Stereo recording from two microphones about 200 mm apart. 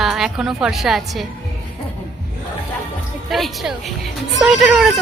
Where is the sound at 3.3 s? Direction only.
Centre (ahead or behind).